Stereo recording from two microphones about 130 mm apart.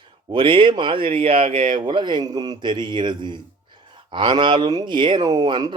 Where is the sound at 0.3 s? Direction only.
40° right (ahead or behind).